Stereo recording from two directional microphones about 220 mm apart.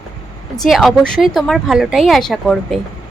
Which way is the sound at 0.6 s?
Centre (ahead or behind).